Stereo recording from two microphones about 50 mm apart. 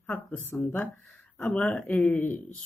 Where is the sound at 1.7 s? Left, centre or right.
Left.